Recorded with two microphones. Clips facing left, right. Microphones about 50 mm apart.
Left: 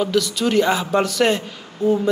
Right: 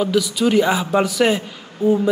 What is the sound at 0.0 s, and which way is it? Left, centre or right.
Speech, centre.